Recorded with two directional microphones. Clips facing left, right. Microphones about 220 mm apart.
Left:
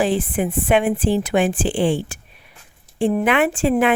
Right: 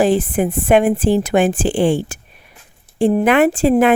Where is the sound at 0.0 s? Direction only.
45° right (ahead or behind).